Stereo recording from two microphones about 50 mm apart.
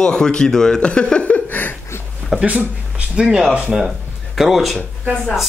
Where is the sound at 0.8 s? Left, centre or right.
Left.